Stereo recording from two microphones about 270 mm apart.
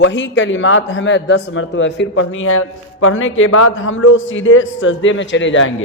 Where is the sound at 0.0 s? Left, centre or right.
Left.